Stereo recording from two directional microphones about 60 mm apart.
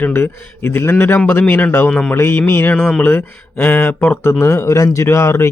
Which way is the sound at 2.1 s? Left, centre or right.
Left.